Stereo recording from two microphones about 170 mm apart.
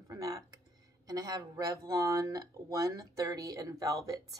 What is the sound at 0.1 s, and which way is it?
Speech, 20° right (ahead or behind).